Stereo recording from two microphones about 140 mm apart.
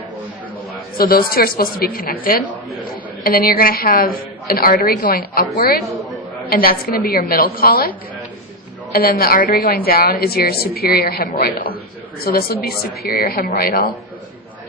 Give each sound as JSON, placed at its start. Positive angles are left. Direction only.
{"t": 0.9, "sound": "a woman's voice", "side_deg": 90}